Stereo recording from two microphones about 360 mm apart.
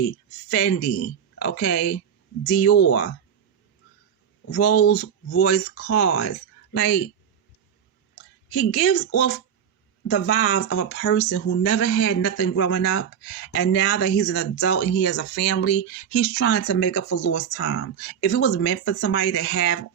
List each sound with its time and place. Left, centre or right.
0.5 s speech: left
4.5 s speech: left
8.5 s speech: left
10.4 s speech: left